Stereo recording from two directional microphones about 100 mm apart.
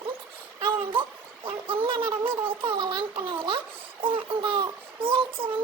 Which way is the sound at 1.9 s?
60° right (ahead or behind).